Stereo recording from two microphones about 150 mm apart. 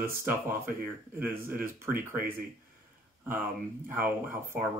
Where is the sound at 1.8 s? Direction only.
15° right (ahead or behind).